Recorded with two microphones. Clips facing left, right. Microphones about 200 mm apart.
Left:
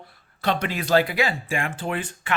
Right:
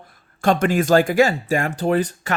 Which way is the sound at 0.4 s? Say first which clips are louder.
Right 8 dB; 45° right (ahead or behind).